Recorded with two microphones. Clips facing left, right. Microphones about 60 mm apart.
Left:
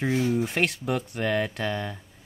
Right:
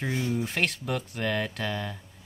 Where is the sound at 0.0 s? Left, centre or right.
Centre.